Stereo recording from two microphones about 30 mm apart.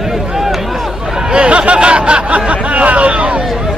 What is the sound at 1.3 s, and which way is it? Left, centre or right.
Speech, right.